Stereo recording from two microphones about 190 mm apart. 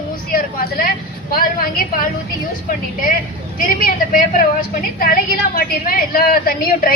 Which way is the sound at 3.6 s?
45° left (ahead or behind).